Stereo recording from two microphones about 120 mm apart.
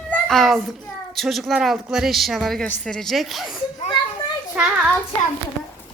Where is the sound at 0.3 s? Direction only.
Centre (ahead or behind).